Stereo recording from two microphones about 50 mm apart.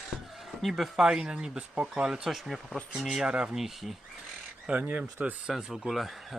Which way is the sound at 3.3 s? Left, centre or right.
Centre.